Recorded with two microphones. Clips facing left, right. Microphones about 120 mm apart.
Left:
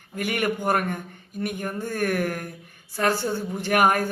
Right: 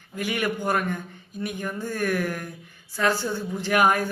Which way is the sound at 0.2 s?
55° left (ahead or behind).